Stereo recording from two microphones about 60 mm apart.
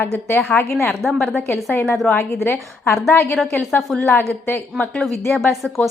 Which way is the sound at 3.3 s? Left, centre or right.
Centre.